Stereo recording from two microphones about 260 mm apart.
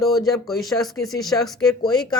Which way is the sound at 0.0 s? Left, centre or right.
Centre.